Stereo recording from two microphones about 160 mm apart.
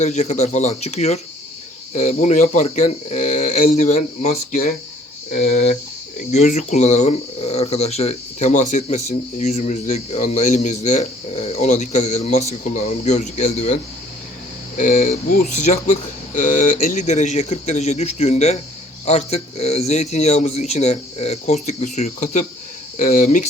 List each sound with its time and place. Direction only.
0.0 s speech: 45° left (ahead or behind)
14.8 s speech: 55° left (ahead or behind)
15.5 s speech: 45° left (ahead or behind)